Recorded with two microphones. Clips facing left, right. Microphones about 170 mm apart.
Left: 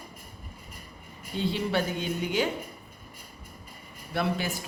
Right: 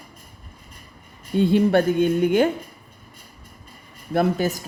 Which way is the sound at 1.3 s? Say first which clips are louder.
Right 11 dB; 50° right (ahead or behind).